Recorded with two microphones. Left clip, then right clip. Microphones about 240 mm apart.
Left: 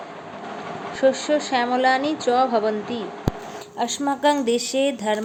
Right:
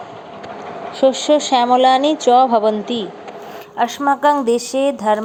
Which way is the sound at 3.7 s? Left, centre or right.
Centre.